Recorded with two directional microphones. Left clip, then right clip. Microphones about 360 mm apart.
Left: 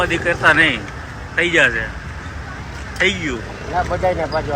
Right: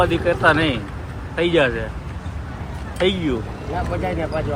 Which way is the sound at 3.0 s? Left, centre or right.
Centre.